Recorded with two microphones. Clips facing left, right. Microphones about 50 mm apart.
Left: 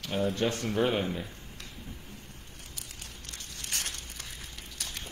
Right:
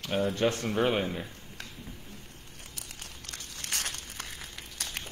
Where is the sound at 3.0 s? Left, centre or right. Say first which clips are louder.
Right 2 dB; right.